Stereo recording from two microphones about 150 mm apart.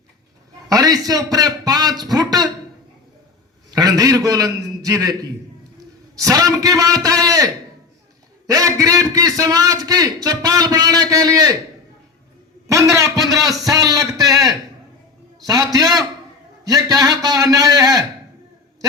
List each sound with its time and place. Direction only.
0.7 s a man's voice: 25° right (ahead or behind)
3.7 s a man's voice: 25° right (ahead or behind)
12.6 s a man's voice: 20° right (ahead or behind)
15.4 s a man's voice: 25° right (ahead or behind)